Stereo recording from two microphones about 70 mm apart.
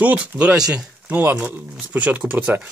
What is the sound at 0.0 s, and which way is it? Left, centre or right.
Speech, right.